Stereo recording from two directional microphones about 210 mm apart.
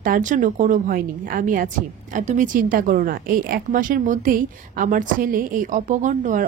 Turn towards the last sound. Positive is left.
turn(degrees=-35)  # may be behind; listen again after turning